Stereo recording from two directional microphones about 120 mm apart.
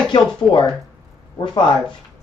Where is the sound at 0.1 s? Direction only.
40° left (ahead or behind).